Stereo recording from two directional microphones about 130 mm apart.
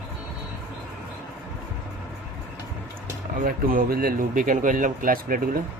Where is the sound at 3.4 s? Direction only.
90° right.